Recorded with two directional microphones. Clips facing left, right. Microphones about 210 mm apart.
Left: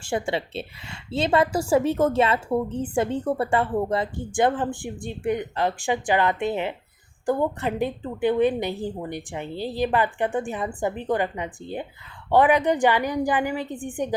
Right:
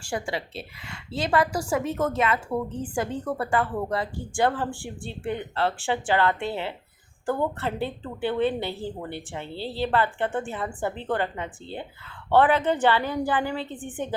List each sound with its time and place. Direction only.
0.0 s a woman's voice: 25° left (ahead or behind)